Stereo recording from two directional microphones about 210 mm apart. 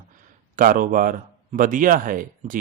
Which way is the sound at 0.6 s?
40° right (ahead or behind).